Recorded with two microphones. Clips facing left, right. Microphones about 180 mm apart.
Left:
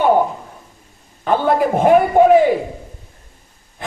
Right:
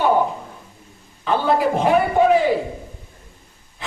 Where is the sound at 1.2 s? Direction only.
50° left (ahead or behind).